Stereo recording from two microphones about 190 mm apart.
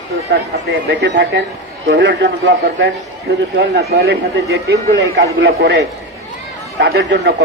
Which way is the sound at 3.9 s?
60° right (ahead or behind).